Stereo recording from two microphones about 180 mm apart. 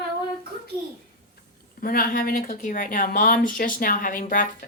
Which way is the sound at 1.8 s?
50° left (ahead or behind).